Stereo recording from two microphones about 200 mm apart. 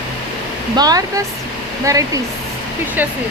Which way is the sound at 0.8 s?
20° right (ahead or behind).